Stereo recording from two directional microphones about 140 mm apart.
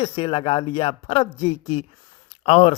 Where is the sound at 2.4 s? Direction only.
50° left (ahead or behind).